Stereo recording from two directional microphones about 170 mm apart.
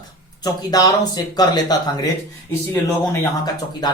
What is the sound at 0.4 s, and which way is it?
Speech, 25° left (ahead or behind).